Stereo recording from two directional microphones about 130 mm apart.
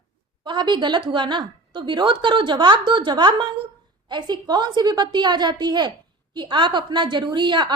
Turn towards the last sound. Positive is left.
turn(degrees=-35)  # may be behind; listen again after turning